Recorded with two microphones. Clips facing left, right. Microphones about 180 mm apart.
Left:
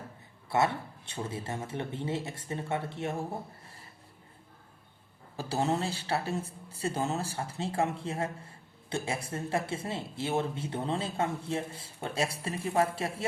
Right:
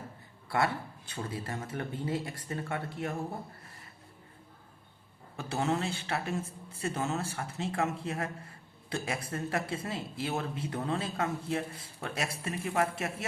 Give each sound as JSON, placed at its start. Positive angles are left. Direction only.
{"t": 0.4, "sound": "speech", "side_deg": 25}
{"t": 5.4, "sound": "speech", "side_deg": 35}